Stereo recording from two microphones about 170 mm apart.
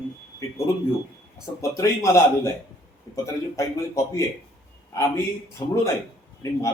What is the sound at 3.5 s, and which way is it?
A man's voice, 20° left (ahead or behind).